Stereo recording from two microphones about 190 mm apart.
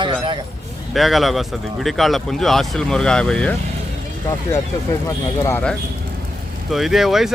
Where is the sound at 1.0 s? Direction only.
Centre (ahead or behind).